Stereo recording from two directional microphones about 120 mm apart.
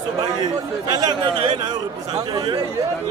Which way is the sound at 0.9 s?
35° right (ahead or behind).